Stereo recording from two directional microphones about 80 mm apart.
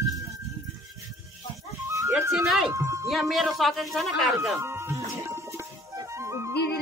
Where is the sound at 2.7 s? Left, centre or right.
Right.